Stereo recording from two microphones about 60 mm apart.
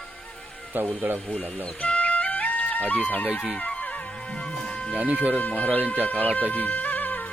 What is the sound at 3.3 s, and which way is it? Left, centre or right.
Speech, centre.